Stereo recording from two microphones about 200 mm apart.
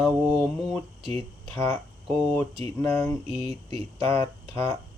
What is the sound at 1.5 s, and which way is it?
Speech, 10° left (ahead or behind).